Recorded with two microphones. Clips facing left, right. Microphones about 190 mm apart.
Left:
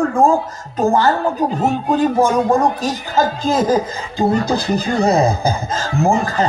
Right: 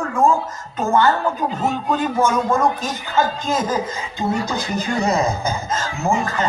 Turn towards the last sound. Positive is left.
turn(degrees=35)  # may be behind; listen again after turning